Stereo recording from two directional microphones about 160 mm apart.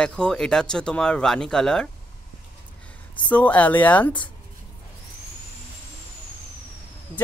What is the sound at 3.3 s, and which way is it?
Speech, 10° left (ahead or behind).